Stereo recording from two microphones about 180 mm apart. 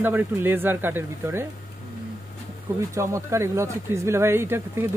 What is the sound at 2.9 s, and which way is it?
Speech, 15° right (ahead or behind).